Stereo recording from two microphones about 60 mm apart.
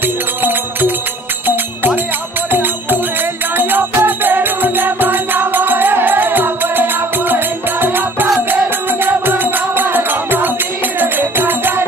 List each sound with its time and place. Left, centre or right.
0.4 s music: right
3.5 s music: right